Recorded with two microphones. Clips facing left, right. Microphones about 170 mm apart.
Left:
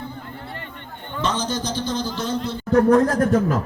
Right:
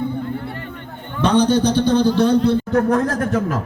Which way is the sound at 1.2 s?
60° right (ahead or behind).